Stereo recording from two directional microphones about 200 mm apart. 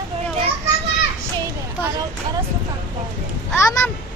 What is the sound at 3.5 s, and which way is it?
Speech, 15° left (ahead or behind).